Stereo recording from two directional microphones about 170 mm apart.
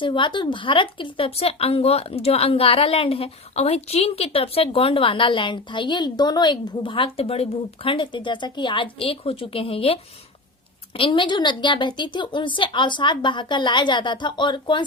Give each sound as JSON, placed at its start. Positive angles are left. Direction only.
{"t": 0.0, "sound": "a woman's voice", "side_deg": 30}